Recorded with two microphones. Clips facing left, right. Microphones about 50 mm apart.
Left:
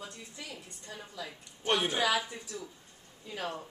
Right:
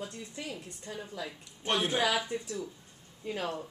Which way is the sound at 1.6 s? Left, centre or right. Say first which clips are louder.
Even; centre.